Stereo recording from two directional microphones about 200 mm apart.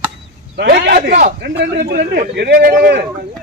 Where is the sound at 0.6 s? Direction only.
50° right (ahead or behind).